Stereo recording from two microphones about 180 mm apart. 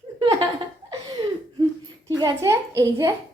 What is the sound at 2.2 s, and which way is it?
Speech, 20° right (ahead or behind).